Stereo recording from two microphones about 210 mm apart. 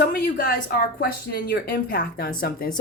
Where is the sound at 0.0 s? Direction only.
45° left (ahead or behind).